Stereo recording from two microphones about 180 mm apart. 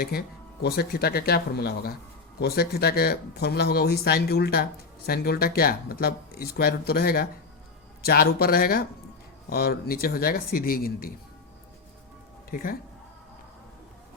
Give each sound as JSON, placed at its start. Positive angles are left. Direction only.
{"t": 0.0, "sound": "speech", "side_deg": 60}
{"t": 12.5, "sound": "speech", "side_deg": 50}